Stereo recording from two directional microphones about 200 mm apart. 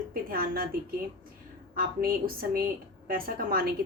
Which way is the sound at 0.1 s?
45° right (ahead or behind).